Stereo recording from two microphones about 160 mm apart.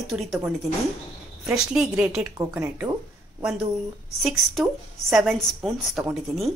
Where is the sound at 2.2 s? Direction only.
15° right (ahead or behind).